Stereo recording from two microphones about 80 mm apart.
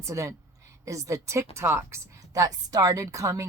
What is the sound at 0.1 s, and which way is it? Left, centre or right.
A woman's voice, right.